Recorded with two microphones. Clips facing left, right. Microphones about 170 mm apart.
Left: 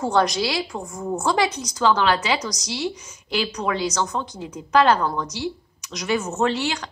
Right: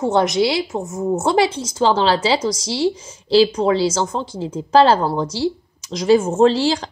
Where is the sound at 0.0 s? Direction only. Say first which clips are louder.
Right 4 dB; 20° right (ahead or behind).